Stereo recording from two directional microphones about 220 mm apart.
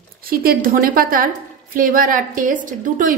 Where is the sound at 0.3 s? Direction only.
40° right (ahead or behind).